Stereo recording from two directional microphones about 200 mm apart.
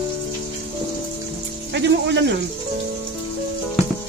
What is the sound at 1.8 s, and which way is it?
Speech, 60° right (ahead or behind).